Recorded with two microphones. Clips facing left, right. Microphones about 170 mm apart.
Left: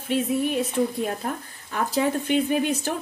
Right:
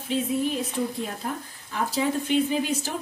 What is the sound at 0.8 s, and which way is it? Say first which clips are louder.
A woman's voice: left 4 dB; 50° left (ahead or behind).